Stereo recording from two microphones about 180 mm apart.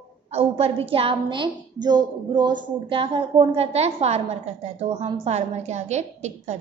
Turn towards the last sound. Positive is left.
turn(degrees=-40)  # may be behind; listen again after turning